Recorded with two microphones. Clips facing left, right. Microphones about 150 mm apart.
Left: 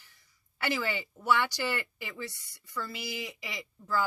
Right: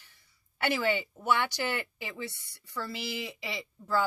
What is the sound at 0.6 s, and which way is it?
Speech, 20° right (ahead or behind).